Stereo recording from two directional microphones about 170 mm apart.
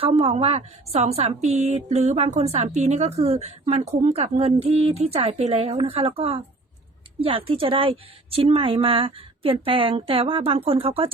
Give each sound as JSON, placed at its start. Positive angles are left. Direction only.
{"t": 0.0, "sound": "a woman's voice", "side_deg": -35}